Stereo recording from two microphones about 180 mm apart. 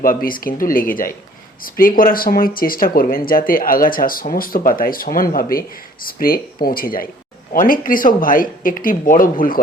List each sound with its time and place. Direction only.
0.0 s speech: 50° left (ahead or behind)